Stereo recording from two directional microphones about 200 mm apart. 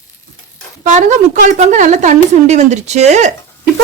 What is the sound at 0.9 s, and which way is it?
Speech, 35° right (ahead or behind).